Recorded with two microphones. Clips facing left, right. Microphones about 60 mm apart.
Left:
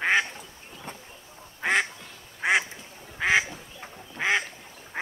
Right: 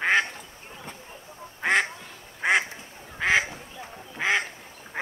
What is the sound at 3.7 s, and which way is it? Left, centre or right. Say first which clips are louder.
Duck: right 2 dB; centre.